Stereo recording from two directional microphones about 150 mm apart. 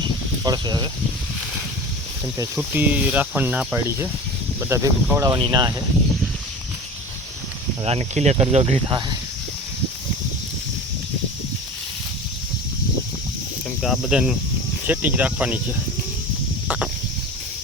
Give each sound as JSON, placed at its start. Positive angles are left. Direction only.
{"t": 0.4, "sound": "speech", "side_deg": -25}
{"t": 2.6, "sound": "speech", "side_deg": -10}
{"t": 7.9, "sound": "speech", "side_deg": -45}
{"t": 13.8, "sound": "cricket", "side_deg": -5}
{"t": 14.8, "sound": "speech", "side_deg": -10}
{"t": 16.6, "sound": "a sound", "side_deg": -10}